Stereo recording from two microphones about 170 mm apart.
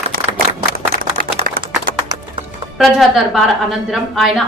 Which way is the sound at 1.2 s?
60° right (ahead or behind).